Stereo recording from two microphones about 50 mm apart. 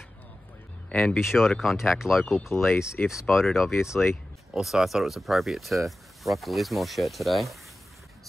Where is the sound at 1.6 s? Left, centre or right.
Centre.